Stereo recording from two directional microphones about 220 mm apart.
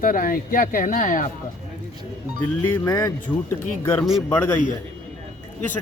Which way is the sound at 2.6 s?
10° left (ahead or behind).